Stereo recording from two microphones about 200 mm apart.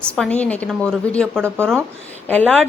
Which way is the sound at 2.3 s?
5° left (ahead or behind).